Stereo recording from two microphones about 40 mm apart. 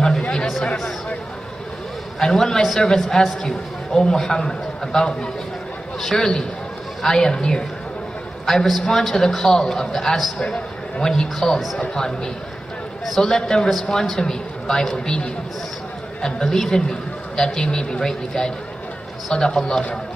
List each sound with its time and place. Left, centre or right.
0.2 s a sound: left
2.1 s a man's voice: centre
8.5 s a man's voice: centre
13.2 s a man's voice: centre
16.2 s a man's voice: centre